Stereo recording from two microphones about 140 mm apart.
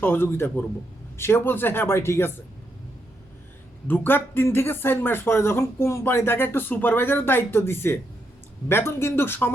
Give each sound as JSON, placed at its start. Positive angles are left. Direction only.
{"t": 0.0, "sound": "speech", "side_deg": 15}
{"t": 3.8, "sound": "speech", "side_deg": 15}